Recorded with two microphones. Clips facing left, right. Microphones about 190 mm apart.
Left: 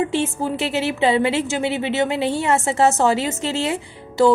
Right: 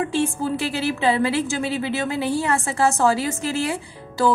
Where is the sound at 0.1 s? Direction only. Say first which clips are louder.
Even; 20° left (ahead or behind).